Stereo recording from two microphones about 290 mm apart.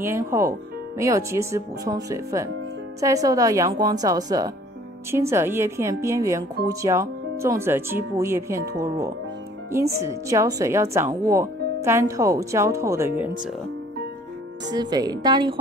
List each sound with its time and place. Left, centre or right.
0.0 s speech: centre
14.7 s speech: centre